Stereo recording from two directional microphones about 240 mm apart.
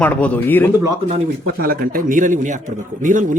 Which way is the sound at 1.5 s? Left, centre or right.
Right.